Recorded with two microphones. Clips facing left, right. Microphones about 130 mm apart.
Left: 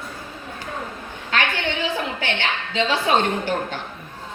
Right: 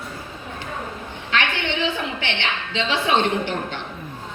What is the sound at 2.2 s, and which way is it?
A woman's voice, 40° left (ahead or behind).